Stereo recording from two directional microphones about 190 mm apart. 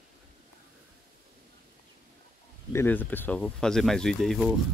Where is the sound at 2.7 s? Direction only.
10° left (ahead or behind).